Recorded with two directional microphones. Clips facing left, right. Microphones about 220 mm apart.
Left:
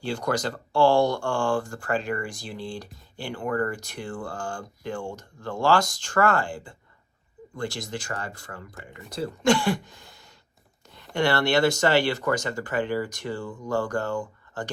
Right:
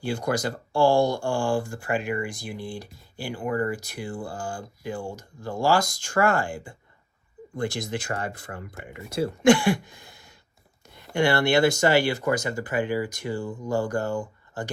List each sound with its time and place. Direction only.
0.0 s speech: 10° right (ahead or behind)
7.9 s speech: 20° right (ahead or behind)
9.6 s speech: 10° right (ahead or behind)